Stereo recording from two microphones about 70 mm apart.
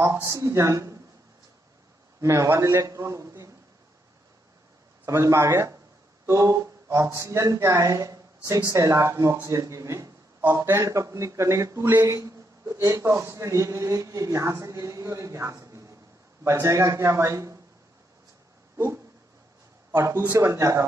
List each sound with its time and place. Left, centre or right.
0.0 s a man's voice: right
2.2 s a man's voice: right
5.0 s a man's voice: right
12.0 s a man's voice: right
20.0 s a man's voice: right